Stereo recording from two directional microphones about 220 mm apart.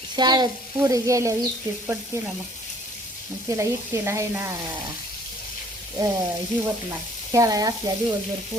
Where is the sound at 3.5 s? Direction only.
15° right (ahead or behind).